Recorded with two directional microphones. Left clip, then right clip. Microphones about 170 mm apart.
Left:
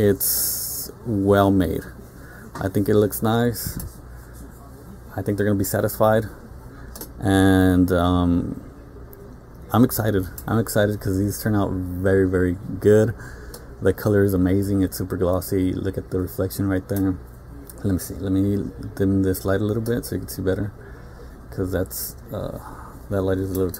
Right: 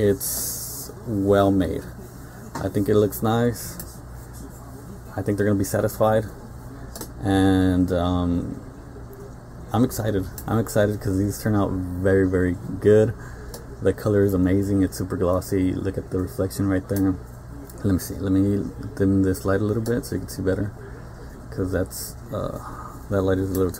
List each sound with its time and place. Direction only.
0.0 s speech: 45° left (ahead or behind); by 3.6 s 30° left (ahead or behind)
5.1 s speech: 25° left (ahead or behind)
7.2 s speech: 45° left (ahead or behind)
9.7 s speech: 50° left (ahead or behind); by 13.1 s 30° left (ahead or behind)
13.8 s speech: 40° left (ahead or behind); by 23.8 s 10° left (ahead or behind)